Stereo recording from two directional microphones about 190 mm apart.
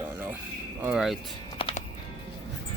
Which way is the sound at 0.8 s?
5° right (ahead or behind).